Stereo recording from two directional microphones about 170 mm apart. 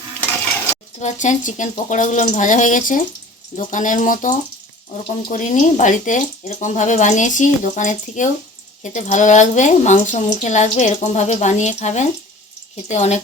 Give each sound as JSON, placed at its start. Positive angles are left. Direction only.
{"t": 1.0, "sound": "speech", "side_deg": 45}